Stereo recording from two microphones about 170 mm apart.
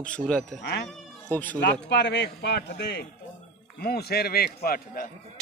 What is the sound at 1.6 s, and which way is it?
A man's voice, 90° left.